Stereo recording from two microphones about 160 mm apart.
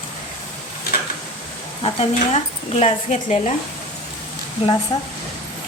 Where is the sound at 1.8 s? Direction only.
40° left (ahead or behind).